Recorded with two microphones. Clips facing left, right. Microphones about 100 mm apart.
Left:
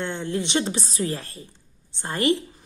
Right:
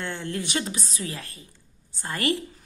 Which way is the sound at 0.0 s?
20° left (ahead or behind).